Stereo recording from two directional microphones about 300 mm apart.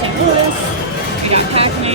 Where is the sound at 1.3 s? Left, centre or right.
Centre.